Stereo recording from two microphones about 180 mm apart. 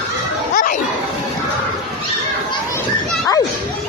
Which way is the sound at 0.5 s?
50° left (ahead or behind).